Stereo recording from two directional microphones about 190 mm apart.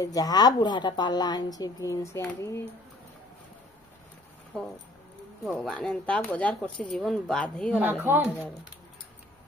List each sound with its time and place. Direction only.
0.0 s a woman's voice: 20° left (ahead or behind)
4.5 s speech: 5° left (ahead or behind)
7.8 s speech: 10° right (ahead or behind)